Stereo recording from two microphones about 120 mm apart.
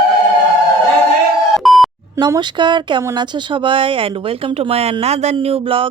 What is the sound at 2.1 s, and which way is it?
Speech, 40° right (ahead or behind).